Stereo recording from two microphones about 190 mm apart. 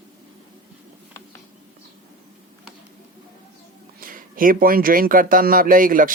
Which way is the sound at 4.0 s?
45° right (ahead or behind).